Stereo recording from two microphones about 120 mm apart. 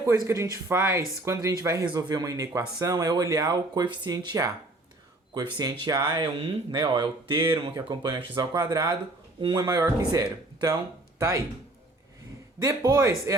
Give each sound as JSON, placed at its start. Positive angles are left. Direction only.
{"t": 0.0, "sound": "speech", "side_deg": -25}
{"t": 12.6, "sound": "speech", "side_deg": -25}